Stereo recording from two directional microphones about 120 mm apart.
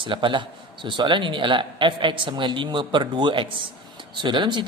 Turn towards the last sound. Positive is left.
turn(degrees=-40)  # may be behind; listen again after turning